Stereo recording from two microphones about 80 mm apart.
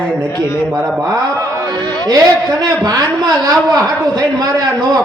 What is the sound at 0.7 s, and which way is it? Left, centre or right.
Mantra, centre.